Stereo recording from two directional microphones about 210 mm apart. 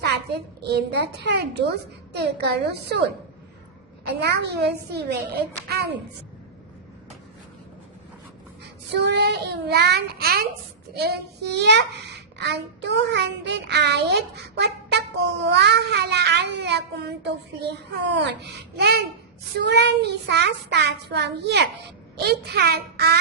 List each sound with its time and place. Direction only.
0.6 s a child's voice: 50° right (ahead or behind)
4.0 s a child's voice: 55° right (ahead or behind)
8.9 s a child's voice: 55° right (ahead or behind)